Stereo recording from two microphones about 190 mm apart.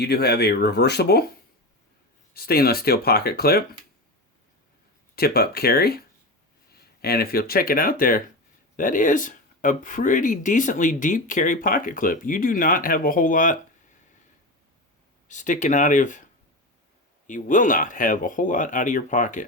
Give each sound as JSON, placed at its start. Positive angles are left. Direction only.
{"t": 0.0, "sound": "speech", "side_deg": 60}
{"t": 2.3, "sound": "speech", "side_deg": 55}
{"t": 5.1, "sound": "speech", "side_deg": 55}
{"t": 15.3, "sound": "speech", "side_deg": 40}
{"t": 17.2, "sound": "speech", "side_deg": 40}